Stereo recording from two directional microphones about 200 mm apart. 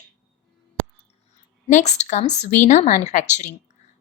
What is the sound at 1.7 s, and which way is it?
A woman's voice, 35° left (ahead or behind).